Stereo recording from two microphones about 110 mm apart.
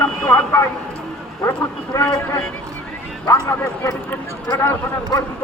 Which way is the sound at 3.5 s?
25° left (ahead or behind).